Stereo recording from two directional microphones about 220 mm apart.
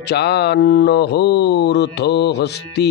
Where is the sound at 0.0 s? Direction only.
50° left (ahead or behind).